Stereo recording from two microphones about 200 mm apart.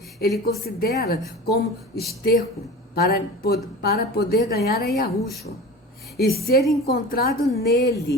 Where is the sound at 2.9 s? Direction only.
50° left (ahead or behind).